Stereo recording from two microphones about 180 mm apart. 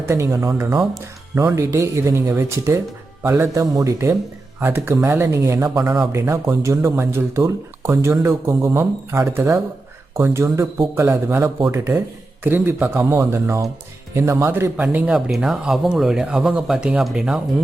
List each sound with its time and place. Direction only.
0.1 s speech: 15° right (ahead or behind)